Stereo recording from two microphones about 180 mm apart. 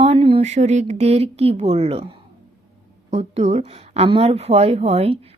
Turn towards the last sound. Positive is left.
turn(degrees=-35)  # may be behind; listen again after turning